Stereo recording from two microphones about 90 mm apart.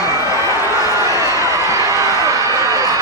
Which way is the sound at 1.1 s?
35° right (ahead or behind).